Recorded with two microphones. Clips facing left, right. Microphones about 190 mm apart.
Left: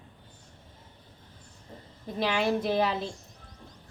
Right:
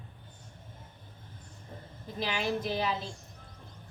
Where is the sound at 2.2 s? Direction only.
60° left (ahead or behind).